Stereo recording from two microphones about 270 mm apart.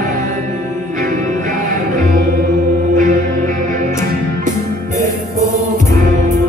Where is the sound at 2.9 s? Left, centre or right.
Right.